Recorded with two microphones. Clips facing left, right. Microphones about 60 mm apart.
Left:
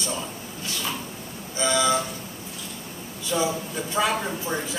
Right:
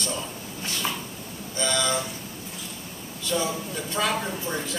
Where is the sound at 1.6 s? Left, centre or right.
Centre.